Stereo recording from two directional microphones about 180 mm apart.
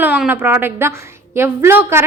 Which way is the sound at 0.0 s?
10° right (ahead or behind).